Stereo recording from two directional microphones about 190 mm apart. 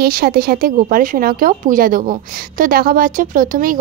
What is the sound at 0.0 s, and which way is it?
Speech, 55° right (ahead or behind).